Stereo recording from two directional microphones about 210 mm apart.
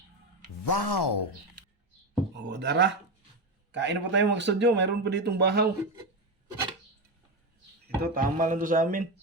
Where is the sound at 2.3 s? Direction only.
55° right (ahead or behind).